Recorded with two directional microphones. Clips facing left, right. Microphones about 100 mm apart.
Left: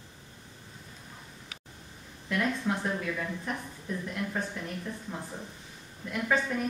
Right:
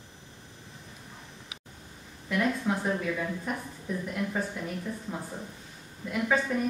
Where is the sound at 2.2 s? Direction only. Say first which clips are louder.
Right 2 dB; 5° right (ahead or behind).